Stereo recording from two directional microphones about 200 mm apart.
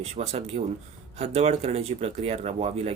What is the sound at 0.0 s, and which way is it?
Speech, 30° right (ahead or behind).